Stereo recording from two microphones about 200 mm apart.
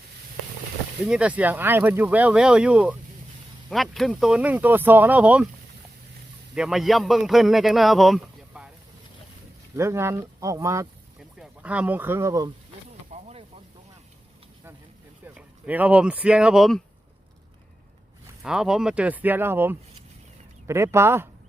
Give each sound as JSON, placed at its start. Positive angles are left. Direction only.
{"t": 1.0, "sound": "speech", "side_deg": -5}
{"t": 6.5, "sound": "a man's voice", "side_deg": 0}
{"t": 9.7, "sound": "speech", "side_deg": -15}
{"t": 13.1, "sound": "a sound", "side_deg": -35}
{"t": 15.4, "sound": "speech", "side_deg": -10}
{"t": 18.4, "sound": "speech", "side_deg": -5}